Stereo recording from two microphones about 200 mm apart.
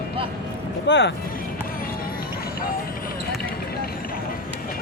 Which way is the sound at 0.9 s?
60° left (ahead or behind).